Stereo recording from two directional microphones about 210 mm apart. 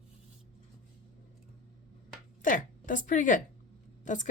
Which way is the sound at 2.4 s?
40° left (ahead or behind).